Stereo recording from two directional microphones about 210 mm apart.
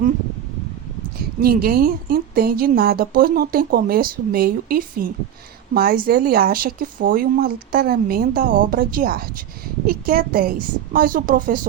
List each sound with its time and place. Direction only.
1.4 s a woman's voice: 45° right (ahead or behind)